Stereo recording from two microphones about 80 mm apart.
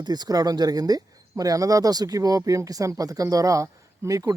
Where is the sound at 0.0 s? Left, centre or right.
Right.